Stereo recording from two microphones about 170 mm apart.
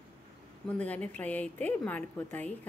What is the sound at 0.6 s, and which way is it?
A woman's voice, 10° left (ahead or behind).